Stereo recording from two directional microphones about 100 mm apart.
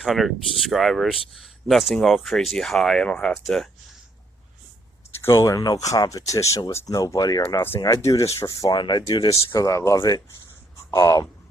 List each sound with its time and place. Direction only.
0.0 s speech: centre (ahead or behind)
5.2 s speech: 30° left (ahead or behind)
7.5 s speech: 25° left (ahead or behind)
8.7 s speech: 45° left (ahead or behind)
9.3 s speech: 30° left (ahead or behind)